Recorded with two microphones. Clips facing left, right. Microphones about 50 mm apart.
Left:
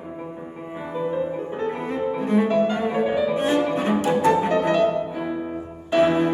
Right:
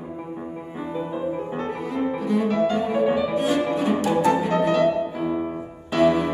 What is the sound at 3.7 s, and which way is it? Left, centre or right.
Cello, left.